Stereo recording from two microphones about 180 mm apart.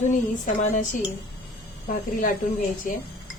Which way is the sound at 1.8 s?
45° left (ahead or behind).